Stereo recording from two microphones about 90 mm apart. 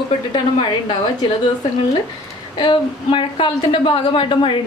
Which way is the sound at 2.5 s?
65° left (ahead or behind).